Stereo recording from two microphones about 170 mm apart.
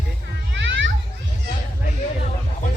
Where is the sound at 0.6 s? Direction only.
90° right.